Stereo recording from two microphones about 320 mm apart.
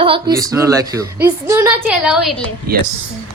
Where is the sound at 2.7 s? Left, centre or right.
Right.